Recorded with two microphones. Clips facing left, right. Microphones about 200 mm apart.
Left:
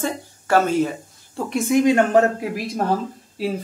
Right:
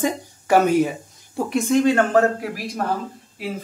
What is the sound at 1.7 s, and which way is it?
Speech, 15° left (ahead or behind).